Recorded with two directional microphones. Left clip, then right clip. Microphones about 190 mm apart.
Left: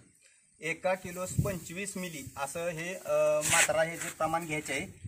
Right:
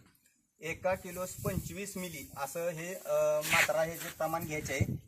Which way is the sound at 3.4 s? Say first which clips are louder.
Left 1 dB; 30° left (ahead or behind).